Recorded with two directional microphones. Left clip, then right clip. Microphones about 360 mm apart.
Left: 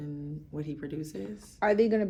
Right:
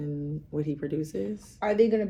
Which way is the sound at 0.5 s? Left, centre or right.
Centre.